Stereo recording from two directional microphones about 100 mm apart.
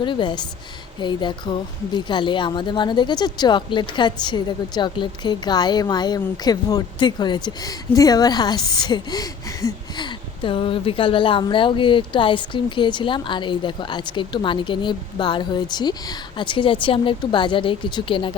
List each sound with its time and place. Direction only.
0.0 s a woman's voice: 50° left (ahead or behind); by 9.7 s 35° left (ahead or behind)
10.0 s speech: 55° left (ahead or behind)